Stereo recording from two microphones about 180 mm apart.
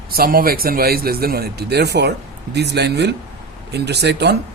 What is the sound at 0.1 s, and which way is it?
A man's voice, 55° right (ahead or behind).